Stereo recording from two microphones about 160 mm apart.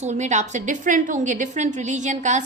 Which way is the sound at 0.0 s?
45° right (ahead or behind).